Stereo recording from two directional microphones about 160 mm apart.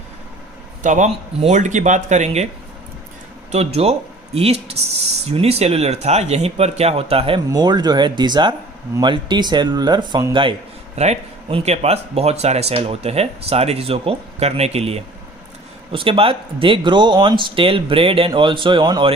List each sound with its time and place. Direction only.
0.8 s speech: 50° right (ahead or behind)
3.5 s speech: 40° right (ahead or behind); by 10.3 s 25° right (ahead or behind)
10.9 s speech: 45° right (ahead or behind)